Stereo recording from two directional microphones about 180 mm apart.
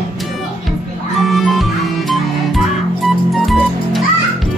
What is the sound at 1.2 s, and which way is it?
Music, centre (ahead or behind).